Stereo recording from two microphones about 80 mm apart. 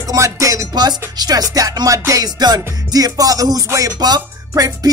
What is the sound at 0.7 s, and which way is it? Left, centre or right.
Music, right.